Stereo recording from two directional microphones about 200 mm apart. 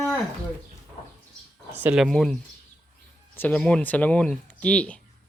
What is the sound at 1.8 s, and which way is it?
Speech, 5° right (ahead or behind).